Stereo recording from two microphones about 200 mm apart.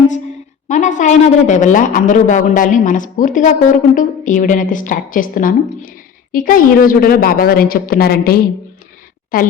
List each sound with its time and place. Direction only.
0.7 s a woman's voice: 40° left (ahead or behind)